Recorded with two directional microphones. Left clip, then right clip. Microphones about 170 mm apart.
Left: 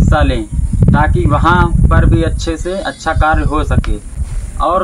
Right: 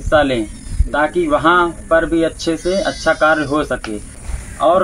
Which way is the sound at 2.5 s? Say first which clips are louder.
Right 2 dB; 20° left (ahead or behind).